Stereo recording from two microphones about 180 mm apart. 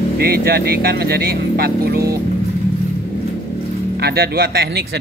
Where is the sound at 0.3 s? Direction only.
60° right (ahead or behind).